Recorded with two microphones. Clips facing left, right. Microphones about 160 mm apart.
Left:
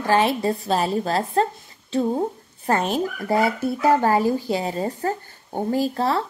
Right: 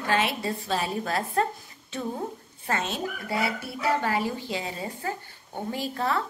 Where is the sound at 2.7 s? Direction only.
40° left (ahead or behind).